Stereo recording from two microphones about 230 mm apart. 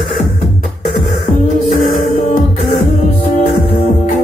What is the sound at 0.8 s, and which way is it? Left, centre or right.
Music, left.